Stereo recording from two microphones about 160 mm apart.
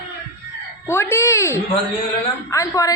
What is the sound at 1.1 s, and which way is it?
A woman's voice, 15° left (ahead or behind).